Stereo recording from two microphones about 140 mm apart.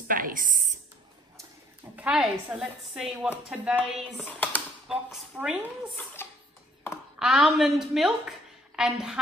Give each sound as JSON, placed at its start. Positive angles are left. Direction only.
{"t": 0.1, "sound": "speech", "side_deg": -75}
{"t": 2.0, "sound": "a woman's voice", "side_deg": -5}
{"t": 4.2, "sound": "speech", "side_deg": 10}
{"t": 4.8, "sound": "a woman's voice", "side_deg": -5}
{"t": 7.2, "sound": "a woman's voice", "side_deg": -5}